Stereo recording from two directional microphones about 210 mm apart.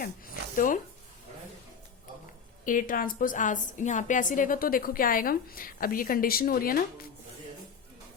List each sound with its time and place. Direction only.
0.5 s a woman's voice: 40° left (ahead or behind)
2.6 s a woman's voice: 40° left (ahead or behind)